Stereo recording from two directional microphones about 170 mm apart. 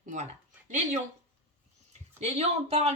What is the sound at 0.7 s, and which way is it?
Speech, 45° right (ahead or behind).